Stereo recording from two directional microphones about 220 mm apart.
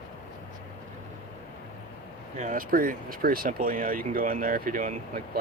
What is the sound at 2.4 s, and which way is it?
Speech, 35° right (ahead or behind).